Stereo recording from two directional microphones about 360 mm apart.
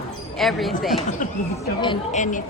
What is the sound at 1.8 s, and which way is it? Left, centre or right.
Speech, centre.